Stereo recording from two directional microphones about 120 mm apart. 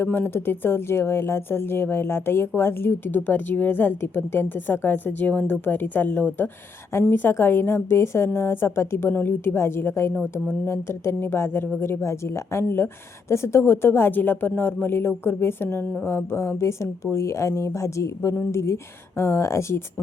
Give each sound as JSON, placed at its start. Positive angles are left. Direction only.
{"t": 0.0, "sound": "speech", "side_deg": 20}